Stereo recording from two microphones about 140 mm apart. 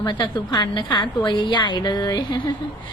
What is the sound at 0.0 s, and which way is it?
A woman's voice, 30° left (ahead or behind).